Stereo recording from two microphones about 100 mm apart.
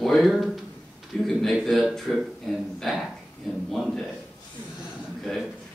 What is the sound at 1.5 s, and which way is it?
Speech, centre (ahead or behind).